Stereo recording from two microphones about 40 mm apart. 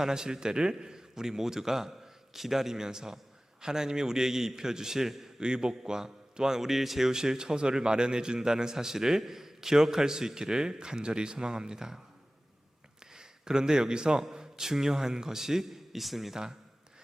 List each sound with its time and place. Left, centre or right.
0.0 s a man's voice: centre
5.4 s a man's voice: centre
13.0 s a man's voice: centre